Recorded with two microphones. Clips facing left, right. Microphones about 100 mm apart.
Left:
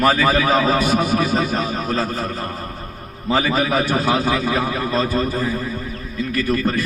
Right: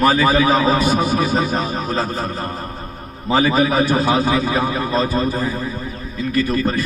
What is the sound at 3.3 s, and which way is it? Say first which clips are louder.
A man's voice: right 3 dB; 30° right (ahead or behind).